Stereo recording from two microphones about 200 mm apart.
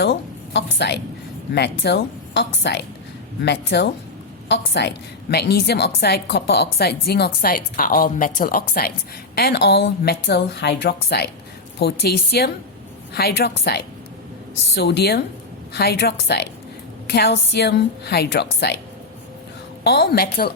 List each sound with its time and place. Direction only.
0.0 s a woman's voice: 60° left (ahead or behind)
19.8 s a woman's voice: 55° left (ahead or behind)